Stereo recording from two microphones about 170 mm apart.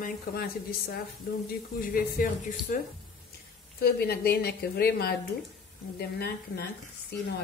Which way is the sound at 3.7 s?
65° left (ahead or behind).